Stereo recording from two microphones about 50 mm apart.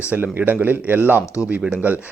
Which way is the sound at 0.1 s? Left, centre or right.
Right.